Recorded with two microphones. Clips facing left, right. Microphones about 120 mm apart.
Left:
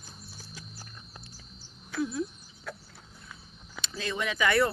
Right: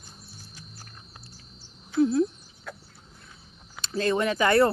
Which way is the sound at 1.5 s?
35° right (ahead or behind).